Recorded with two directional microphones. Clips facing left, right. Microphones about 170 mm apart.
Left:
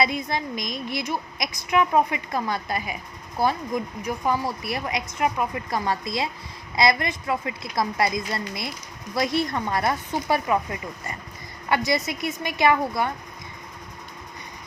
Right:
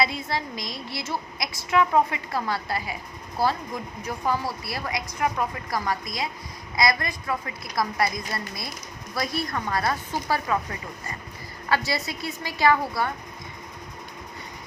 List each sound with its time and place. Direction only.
0.0 s a woman's voice: 20° left (ahead or behind)